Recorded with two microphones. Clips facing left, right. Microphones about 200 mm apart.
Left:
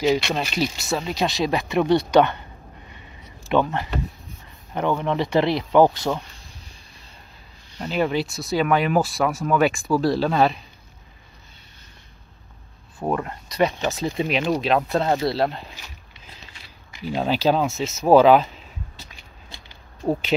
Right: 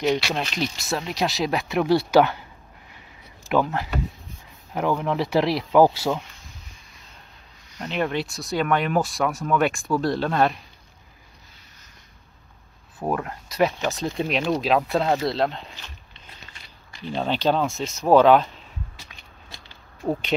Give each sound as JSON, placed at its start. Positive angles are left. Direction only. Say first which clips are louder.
{"t": 0.0, "sound": "speech", "louder": "left 2 dB", "side_deg": 0}
{"t": 3.4, "sound": "speech", "louder": "left 1 dB", "side_deg": 0}
{"t": 7.8, "sound": "speech", "louder": "left 3 dB", "side_deg": 5}
{"t": 13.0, "sound": "speech", "louder": "left 1 dB", "side_deg": 0}
{"t": 16.9, "sound": "speech", "louder": "left 2 dB", "side_deg": 10}
{"t": 20.0, "sound": "speech", "louder": "left 2 dB", "side_deg": 15}